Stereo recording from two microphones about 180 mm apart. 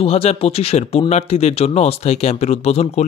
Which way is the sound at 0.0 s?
35° left (ahead or behind).